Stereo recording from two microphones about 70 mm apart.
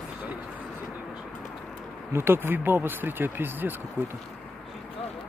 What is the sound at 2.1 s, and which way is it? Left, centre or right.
Speech, right.